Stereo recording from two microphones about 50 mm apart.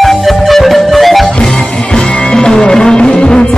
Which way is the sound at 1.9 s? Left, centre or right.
Centre.